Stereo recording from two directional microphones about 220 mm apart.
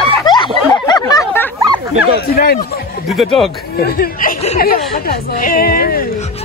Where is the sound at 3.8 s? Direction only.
45° left (ahead or behind).